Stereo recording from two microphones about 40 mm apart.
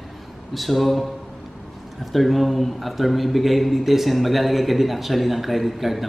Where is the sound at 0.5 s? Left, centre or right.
Centre.